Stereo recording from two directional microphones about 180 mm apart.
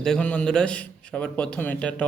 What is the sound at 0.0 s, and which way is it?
Speech, 5° left (ahead or behind).